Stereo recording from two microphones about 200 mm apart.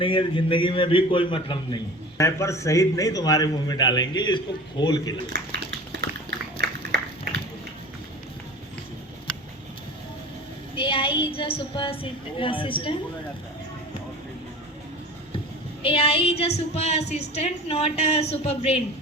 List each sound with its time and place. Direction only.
0.0 s a man's voice: 25° left (ahead or behind)
2.1 s a man's voice: 15° left (ahead or behind)
6.0 s dog: 55° right (ahead or behind)
6.6 s a sound: 60° right (ahead or behind)
10.8 s child singing: 25° left (ahead or behind)
12.4 s a man's voice: 25° left (ahead or behind)
15.8 s a man's voice: 30° left (ahead or behind)